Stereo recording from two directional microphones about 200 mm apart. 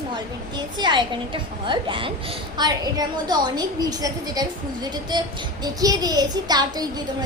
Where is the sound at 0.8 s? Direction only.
25° right (ahead or behind).